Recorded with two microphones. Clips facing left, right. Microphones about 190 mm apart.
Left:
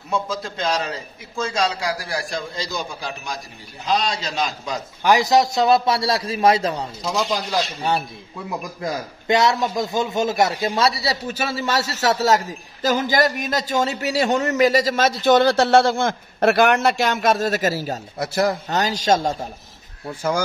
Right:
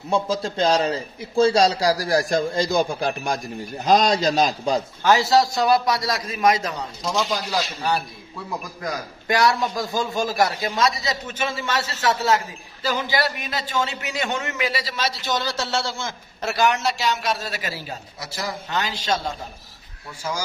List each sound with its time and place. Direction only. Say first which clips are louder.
0.1 s a man's voice: right 3 dB; 30° right (ahead or behind)
5.0 s a man's voice: left 2 dB; 15° left (ahead or behind)
7.0 s speech: right 1 dB; centre (ahead or behind)
8.8 s a man's voice: left 4 dB; 25° left (ahead or behind); by 19.3 s 45° left (ahead or behind)
20.1 s speech: left 7 dB; 55° left (ahead or behind)